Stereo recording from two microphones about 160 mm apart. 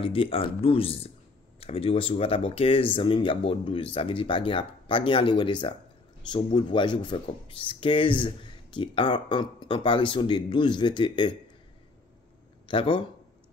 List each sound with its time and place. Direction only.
0.0 s speech: 35° left (ahead or behind)
12.6 s speech: 30° left (ahead or behind)